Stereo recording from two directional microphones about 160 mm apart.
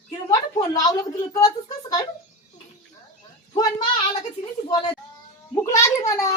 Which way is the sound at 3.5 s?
25° left (ahead or behind).